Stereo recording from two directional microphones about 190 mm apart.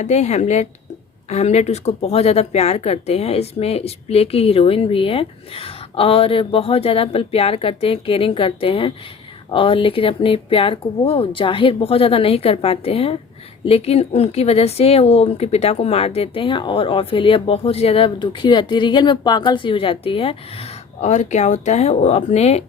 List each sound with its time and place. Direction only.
0.0 s speech: 35° left (ahead or behind)